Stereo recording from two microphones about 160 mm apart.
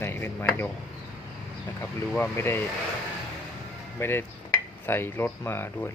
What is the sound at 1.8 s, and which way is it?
Speech, 15° left (ahead or behind).